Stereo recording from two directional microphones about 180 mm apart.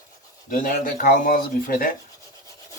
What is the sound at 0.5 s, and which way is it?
Speech, 50° left (ahead or behind).